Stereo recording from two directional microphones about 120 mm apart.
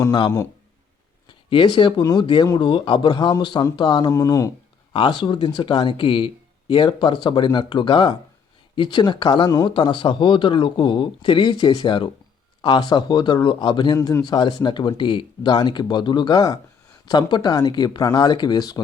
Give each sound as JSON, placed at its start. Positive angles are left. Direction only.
{"t": 1.3, "sound": "speech", "side_deg": 40}
{"t": 4.1, "sound": "speech", "side_deg": 30}
{"t": 4.9, "sound": "speech", "side_deg": 40}